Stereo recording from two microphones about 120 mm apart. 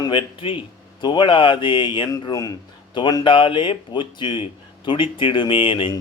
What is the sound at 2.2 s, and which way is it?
Speech, 30° left (ahead or behind).